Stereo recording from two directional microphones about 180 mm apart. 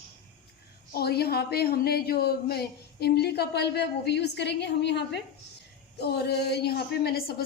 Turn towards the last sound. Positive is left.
turn(degrees=60)  # may be behind; listen again after turning